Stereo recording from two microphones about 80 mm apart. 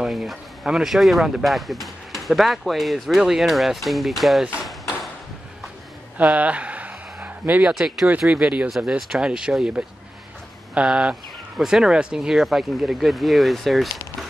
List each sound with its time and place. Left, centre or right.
0.0 s speech: centre
6.1 s a sound: centre
8.2 s speech: centre
8.6 s speech: centre